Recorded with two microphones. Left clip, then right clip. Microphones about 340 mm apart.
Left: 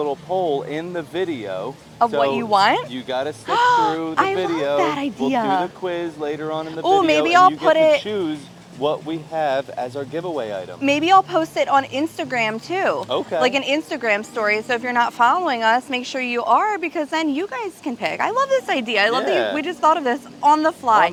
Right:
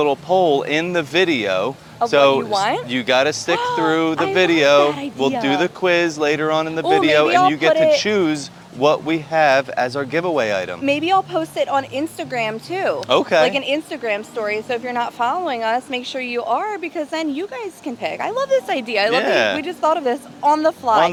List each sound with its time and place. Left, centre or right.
0.0 s speech: right
2.5 s a woman's voice: left
2.9 s speech: right
3.5 s a woman's voice: left
3.8 s speech: right
4.9 s a woman's voice: left
5.5 s speech: right
7.7 s a woman's voice: left
8.0 s speech: right
10.8 s a woman's voice: left
13.1 s speech: right
13.4 s a woman's voice: left
19.1 s speech: right
19.5 s speech: centre